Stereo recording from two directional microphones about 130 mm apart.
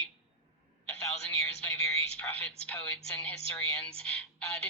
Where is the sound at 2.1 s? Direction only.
5° left (ahead or behind).